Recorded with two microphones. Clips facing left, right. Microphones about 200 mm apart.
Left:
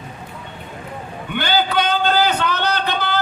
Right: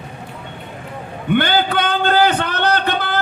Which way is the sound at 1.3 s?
55° right (ahead or behind).